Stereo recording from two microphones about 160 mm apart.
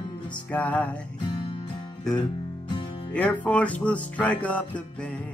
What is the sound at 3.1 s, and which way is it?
Music, 10° left (ahead or behind).